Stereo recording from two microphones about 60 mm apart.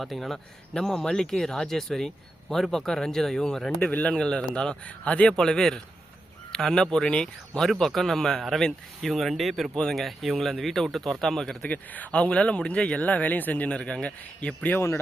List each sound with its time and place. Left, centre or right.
0.0 s speech: centre
7.7 s speech: centre
11.7 s speech: left
14.8 s speech: left